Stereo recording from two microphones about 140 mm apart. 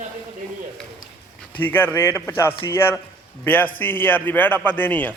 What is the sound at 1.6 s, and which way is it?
A man's voice, 15° left (ahead or behind).